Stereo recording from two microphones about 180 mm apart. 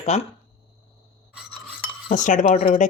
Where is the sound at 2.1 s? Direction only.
45° left (ahead or behind).